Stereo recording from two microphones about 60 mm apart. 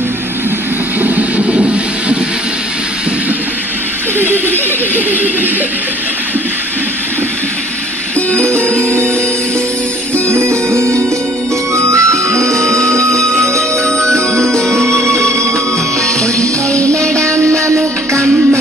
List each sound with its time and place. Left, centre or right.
1.4 s a sound: centre
4.2 s a sound: right
8.8 s music: right
10.3 s music: right
12.5 s music: centre
14.1 s music: right
16.2 s music: centre
17.2 s music: right